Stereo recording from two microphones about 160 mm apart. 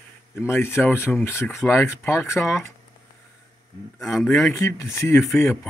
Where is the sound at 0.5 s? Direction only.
15° left (ahead or behind).